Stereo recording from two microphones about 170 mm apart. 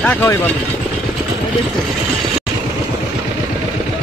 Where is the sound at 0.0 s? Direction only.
10° left (ahead or behind).